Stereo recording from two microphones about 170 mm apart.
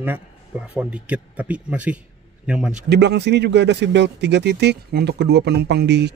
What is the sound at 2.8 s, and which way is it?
Speech, 80° right.